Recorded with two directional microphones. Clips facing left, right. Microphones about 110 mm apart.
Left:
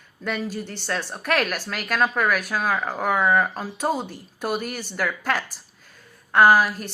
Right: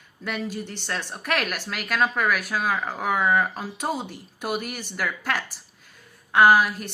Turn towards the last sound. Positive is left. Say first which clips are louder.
# left 1 dB
turn(degrees=40)  # may be behind; listen again after turning